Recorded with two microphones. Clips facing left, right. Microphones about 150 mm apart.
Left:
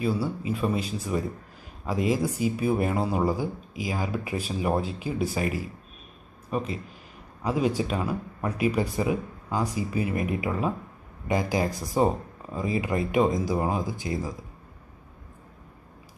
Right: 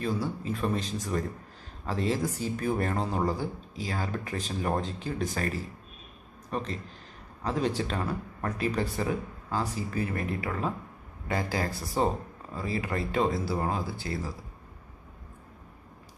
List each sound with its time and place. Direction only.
0.0 s speech: 10° left (ahead or behind)